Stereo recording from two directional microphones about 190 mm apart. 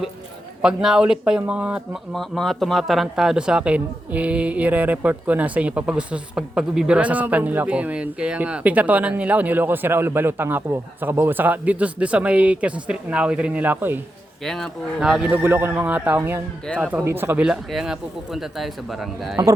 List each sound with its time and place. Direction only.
0.6 s speech: 5° right (ahead or behind)
14.4 s speech: centre (ahead or behind)